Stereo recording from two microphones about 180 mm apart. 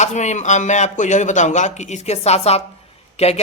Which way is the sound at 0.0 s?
40° left (ahead or behind).